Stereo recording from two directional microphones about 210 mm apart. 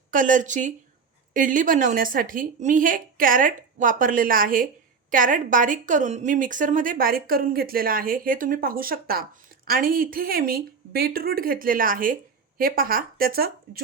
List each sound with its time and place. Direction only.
0.1 s a woman's voice: 40° right (ahead or behind)